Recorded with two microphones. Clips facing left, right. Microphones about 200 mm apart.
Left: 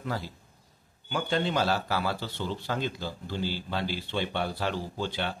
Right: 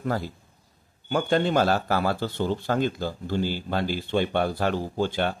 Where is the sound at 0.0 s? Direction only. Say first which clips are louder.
Right 6 dB; 50° right (ahead or behind).